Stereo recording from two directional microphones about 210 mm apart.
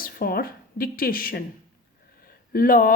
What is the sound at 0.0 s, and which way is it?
A woman's voice, 45° left (ahead or behind).